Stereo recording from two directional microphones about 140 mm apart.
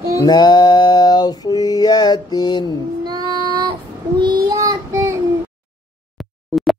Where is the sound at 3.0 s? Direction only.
30° right (ahead or behind).